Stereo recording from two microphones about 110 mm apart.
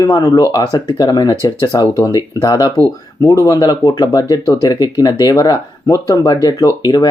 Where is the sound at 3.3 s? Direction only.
30° left (ahead or behind).